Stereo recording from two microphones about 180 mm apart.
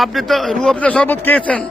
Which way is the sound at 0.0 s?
Centre (ahead or behind).